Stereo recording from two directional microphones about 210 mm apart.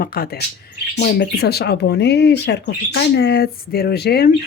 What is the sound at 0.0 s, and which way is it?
Speech, 45° left (ahead or behind).